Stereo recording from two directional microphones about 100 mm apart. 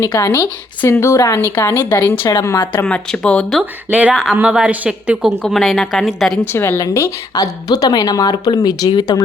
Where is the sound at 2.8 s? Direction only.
10° left (ahead or behind).